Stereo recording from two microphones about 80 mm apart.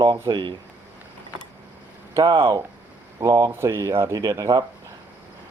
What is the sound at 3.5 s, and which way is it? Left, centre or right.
Speech, right.